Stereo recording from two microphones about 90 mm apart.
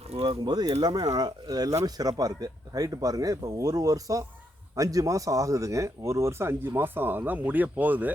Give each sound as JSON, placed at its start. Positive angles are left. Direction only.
{"t": 0.3, "sound": "speech", "side_deg": -50}